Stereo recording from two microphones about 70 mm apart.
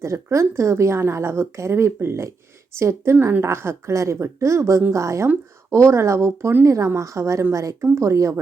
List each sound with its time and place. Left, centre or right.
0.0 s a woman's voice: right